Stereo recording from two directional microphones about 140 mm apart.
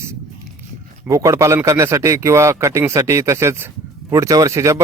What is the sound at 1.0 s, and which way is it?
A man's voice, 20° right (ahead or behind).